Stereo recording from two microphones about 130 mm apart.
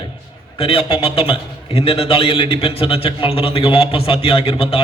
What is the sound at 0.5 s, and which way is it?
A man's voice, 45° left (ahead or behind).